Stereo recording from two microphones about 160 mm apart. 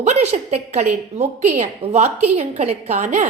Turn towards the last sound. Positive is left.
turn(degrees=-45)  # may be behind; listen again after turning